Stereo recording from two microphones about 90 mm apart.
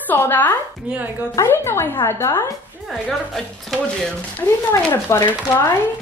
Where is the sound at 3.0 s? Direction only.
Centre (ahead or behind).